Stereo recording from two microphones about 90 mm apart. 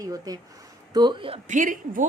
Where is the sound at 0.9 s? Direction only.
55° right (ahead or behind).